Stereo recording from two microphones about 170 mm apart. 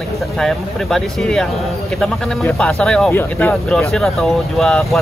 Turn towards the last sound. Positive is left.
turn(degrees=0)  # may be behind; listen again after turning